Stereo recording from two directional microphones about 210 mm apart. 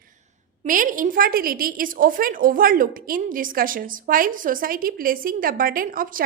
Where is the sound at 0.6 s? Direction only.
40° right (ahead or behind).